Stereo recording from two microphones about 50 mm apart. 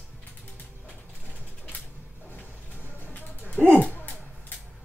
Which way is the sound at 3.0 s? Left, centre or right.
Left.